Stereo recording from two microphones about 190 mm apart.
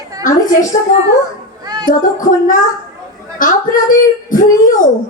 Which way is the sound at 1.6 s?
20° right (ahead or behind).